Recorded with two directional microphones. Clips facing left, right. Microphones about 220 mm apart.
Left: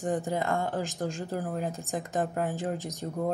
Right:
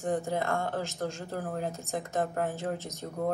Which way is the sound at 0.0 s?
15° left (ahead or behind).